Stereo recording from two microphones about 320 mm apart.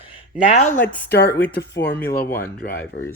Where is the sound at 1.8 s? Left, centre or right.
Centre.